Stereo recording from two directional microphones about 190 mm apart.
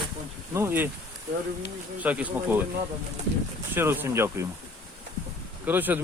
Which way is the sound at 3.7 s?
10° right (ahead or behind).